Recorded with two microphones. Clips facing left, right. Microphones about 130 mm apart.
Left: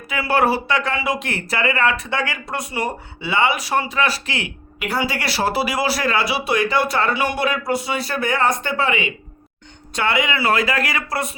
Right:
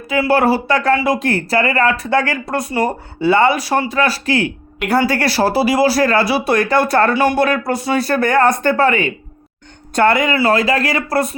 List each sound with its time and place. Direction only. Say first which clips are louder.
0.1 s speech: right 5 dB; 30° right (ahead or behind)
4.9 s speech: right 8 dB; 50° right (ahead or behind)